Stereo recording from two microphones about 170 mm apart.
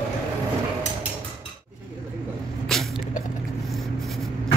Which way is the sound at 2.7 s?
5° left (ahead or behind).